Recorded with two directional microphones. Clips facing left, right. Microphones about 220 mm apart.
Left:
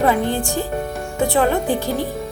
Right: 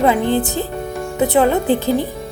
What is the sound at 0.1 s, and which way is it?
Speech, 20° right (ahead or behind).